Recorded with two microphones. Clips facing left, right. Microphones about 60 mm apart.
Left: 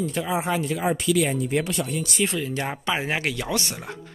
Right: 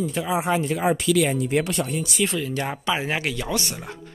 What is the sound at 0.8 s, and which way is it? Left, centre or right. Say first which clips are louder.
Speech: right 1 dB; right.